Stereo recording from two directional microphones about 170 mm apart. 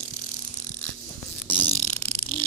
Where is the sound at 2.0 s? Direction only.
60° left (ahead or behind).